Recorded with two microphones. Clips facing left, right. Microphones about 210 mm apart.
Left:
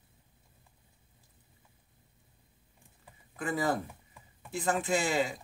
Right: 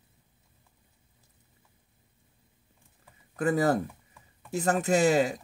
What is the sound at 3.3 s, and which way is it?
Speech, 40° right (ahead or behind).